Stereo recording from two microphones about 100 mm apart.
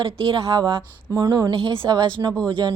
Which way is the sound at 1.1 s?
35° right (ahead or behind).